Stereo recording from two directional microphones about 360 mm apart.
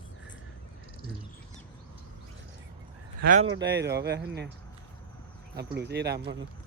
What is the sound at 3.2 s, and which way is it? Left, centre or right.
Speech, right.